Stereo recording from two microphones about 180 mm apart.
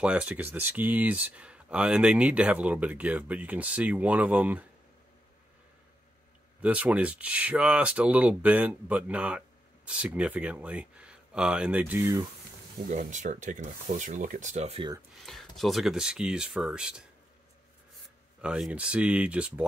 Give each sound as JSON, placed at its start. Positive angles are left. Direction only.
{"t": 0.0, "sound": "speech", "side_deg": -5}
{"t": 6.6, "sound": "speech", "side_deg": -10}
{"t": 12.8, "sound": "speech", "side_deg": -45}
{"t": 15.2, "sound": "speech", "side_deg": 0}
{"t": 18.4, "sound": "speech", "side_deg": -5}